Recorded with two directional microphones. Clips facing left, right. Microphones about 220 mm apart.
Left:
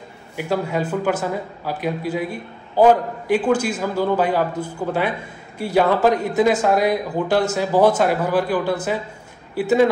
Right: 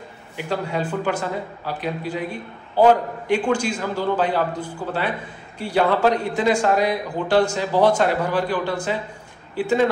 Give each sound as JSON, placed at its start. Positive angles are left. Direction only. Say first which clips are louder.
{"t": 0.4, "sound": "a man's voice", "louder": "left 3 dB", "side_deg": 10}